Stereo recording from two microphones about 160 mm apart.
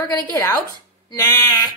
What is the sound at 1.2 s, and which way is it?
Speech, 20° left (ahead or behind).